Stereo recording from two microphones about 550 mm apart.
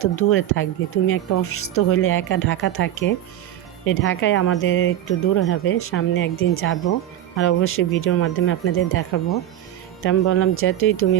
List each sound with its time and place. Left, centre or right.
0.0 s speech: left